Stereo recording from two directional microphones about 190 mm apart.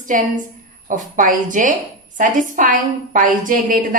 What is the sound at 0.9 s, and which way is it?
A woman's voice, 45° right (ahead or behind).